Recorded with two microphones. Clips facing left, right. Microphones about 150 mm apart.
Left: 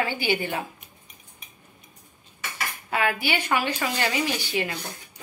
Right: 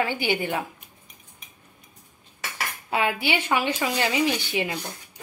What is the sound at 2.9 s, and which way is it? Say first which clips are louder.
Speech: right 1 dB; 20° right (ahead or behind).